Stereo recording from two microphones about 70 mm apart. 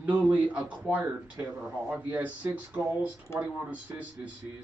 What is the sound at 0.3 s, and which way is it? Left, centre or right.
A man's voice, right.